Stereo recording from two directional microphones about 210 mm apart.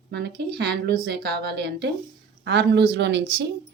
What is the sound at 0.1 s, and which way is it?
A woman's voice, 50° right (ahead or behind).